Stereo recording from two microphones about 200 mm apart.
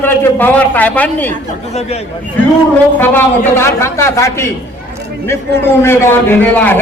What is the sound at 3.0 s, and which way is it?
A man's voice, 10° left (ahead or behind).